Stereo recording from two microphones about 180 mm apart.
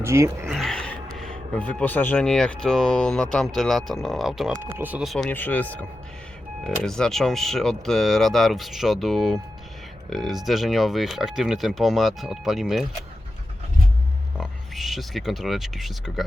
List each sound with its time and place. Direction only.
0.0 s speech: 15° right (ahead or behind)
0.4 s a sound: centre (ahead or behind)
1.1 s speech: 5° left (ahead or behind)
6.7 s speech: centre (ahead or behind)
14.3 s speech: centre (ahead or behind)